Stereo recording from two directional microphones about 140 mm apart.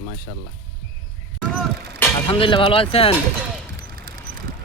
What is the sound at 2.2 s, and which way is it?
Speech, 40° left (ahead or behind).